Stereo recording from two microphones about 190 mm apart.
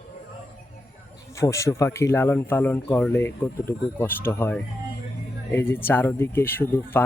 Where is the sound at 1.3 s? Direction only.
15° left (ahead or behind).